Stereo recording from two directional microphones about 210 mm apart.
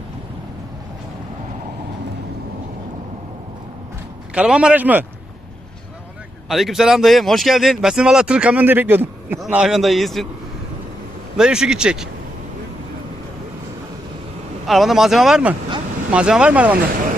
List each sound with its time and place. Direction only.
4.3 s speech: 5° right (ahead or behind)
6.5 s speech: centre (ahead or behind)
11.3 s speech: 5° right (ahead or behind)
14.7 s speech: centre (ahead or behind)